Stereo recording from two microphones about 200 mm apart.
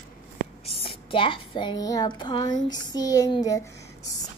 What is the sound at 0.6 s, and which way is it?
A woman's voice, 25° left (ahead or behind).